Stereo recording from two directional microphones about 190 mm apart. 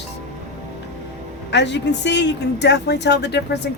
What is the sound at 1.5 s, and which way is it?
Speech, 65° left (ahead or behind).